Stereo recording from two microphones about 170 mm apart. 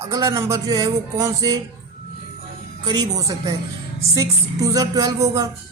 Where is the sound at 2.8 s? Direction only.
25° right (ahead or behind).